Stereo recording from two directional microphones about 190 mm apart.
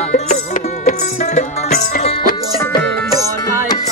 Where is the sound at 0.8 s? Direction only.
35° left (ahead or behind).